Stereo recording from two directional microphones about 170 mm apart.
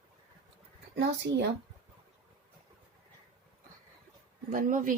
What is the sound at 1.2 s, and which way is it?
Speech, 90° right.